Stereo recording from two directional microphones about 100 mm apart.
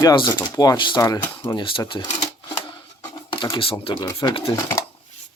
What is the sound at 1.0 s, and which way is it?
Speech, 40° left (ahead or behind).